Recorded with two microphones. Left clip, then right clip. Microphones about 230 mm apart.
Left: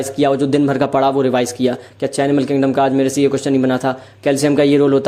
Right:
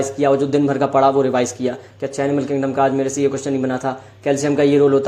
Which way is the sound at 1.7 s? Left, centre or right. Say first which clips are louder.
Left 4 dB; left.